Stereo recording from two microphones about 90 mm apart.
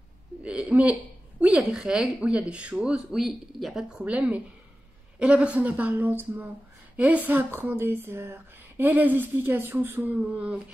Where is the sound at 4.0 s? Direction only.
15° right (ahead or behind).